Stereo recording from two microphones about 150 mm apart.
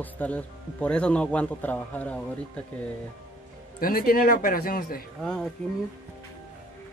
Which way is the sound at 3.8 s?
75° left (ahead or behind).